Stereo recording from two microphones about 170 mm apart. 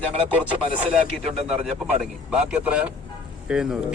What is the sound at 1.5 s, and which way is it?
A man's voice, 5° right (ahead or behind).